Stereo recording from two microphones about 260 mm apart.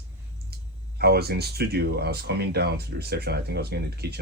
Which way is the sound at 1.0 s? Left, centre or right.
Right.